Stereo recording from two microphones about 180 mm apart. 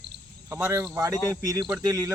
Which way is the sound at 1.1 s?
15° left (ahead or behind).